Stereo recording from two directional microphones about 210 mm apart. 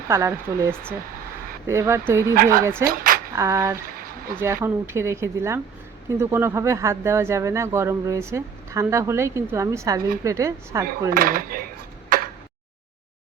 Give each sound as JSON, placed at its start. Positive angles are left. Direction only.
{"t": 0.1, "sound": "speech", "side_deg": -15}
{"t": 2.3, "sound": "speech", "side_deg": -40}
{"t": 2.6, "sound": "speech", "side_deg": -10}
{"t": 2.9, "sound": "a sound", "side_deg": -40}
{"t": 3.3, "sound": "speech", "side_deg": -15}
{"t": 11.1, "sound": "cutlery", "side_deg": -40}